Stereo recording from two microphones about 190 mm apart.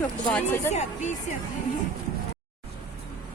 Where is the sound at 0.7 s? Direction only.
40° left (ahead or behind).